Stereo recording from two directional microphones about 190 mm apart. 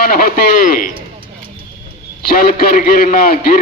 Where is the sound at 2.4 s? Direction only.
55° left (ahead or behind).